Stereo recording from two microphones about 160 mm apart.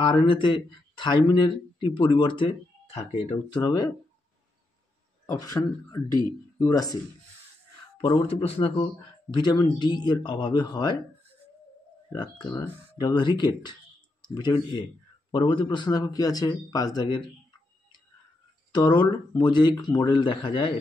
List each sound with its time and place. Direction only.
0.0 s speech: 30° left (ahead or behind)
3.4 s speech: 25° left (ahead or behind)
5.2 s speech: 20° left (ahead or behind)
8.0 s speech: 35° left (ahead or behind)
12.1 s speech: 25° left (ahead or behind)
18.7 s speech: 30° left (ahead or behind)